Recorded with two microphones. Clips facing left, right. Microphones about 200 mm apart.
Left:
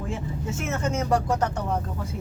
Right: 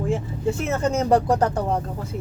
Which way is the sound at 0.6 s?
35° right (ahead or behind).